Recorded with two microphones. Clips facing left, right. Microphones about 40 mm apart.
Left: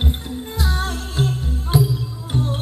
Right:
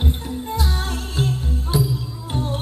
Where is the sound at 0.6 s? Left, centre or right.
Centre.